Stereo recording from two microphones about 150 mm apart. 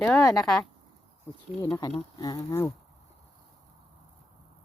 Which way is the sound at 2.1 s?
25° left (ahead or behind).